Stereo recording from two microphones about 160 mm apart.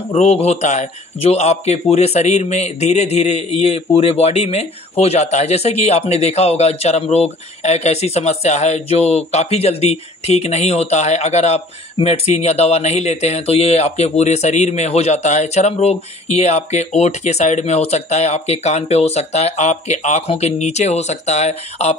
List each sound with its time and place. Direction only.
0.1 s speech: 40° left (ahead or behind)